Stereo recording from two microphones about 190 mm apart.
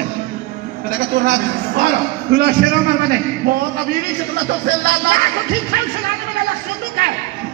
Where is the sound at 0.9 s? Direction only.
50° right (ahead or behind).